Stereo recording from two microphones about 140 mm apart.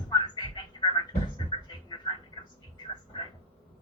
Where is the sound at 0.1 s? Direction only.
30° left (ahead or behind).